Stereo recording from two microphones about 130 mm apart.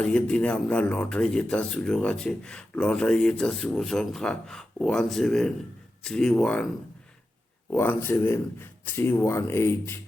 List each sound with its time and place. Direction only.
0.0 s speech: 10° left (ahead or behind)
7.7 s speech: 15° left (ahead or behind)